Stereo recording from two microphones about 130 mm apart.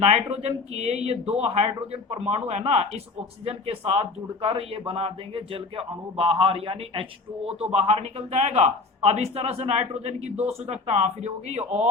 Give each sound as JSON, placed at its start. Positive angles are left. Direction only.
{"t": 0.0, "sound": "a man's voice", "side_deg": -50}